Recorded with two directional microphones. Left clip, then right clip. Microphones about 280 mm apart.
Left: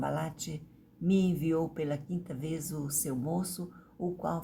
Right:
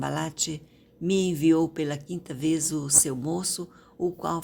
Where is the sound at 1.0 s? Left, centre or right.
Right.